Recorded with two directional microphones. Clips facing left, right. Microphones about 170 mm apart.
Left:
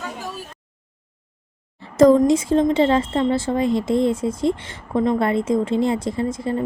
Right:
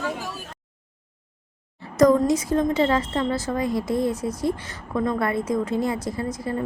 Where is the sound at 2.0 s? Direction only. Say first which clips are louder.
Left 4 dB; 25° left (ahead or behind).